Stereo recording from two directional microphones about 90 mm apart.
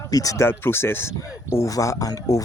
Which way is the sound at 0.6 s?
25° left (ahead or behind).